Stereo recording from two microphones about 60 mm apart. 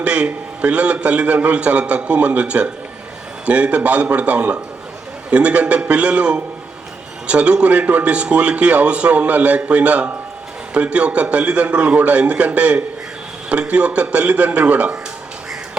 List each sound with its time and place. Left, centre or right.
0.0 s a man's voice: right